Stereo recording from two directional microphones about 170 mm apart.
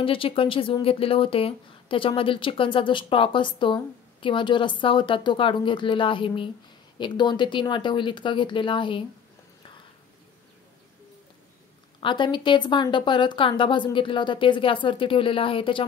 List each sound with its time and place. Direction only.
0.0 s speech: 30° left (ahead or behind)
12.0 s speech: 30° left (ahead or behind)